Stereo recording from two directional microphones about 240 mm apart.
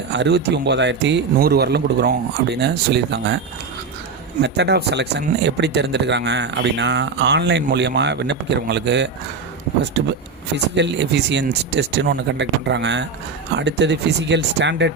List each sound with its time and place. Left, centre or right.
0.1 s speech: right
4.4 s speech: right